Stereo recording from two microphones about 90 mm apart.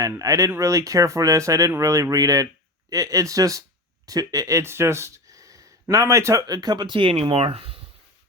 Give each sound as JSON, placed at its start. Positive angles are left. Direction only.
{"t": 0.2, "sound": "speech", "side_deg": -40}